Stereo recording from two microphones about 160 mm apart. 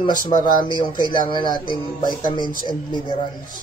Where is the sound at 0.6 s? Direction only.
30° left (ahead or behind).